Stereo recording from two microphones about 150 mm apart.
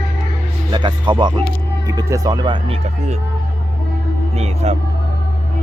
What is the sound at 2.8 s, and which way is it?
Speech, 50° right (ahead or behind).